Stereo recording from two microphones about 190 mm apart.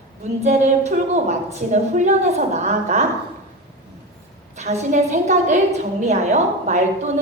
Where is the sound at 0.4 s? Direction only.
40° right (ahead or behind).